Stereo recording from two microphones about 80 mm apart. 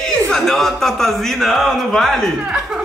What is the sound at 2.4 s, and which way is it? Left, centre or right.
Speech, centre.